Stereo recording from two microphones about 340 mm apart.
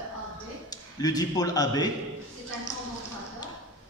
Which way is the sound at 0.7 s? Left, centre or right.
Centre.